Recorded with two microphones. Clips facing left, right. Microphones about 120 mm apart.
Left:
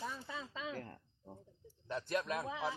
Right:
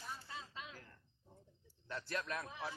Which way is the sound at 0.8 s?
50° left (ahead or behind).